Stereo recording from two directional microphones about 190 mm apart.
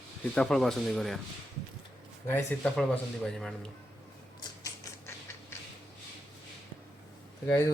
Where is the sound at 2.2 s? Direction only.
10° left (ahead or behind).